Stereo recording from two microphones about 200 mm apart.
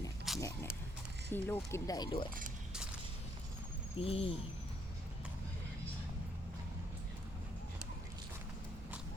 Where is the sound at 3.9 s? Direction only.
30° left (ahead or behind).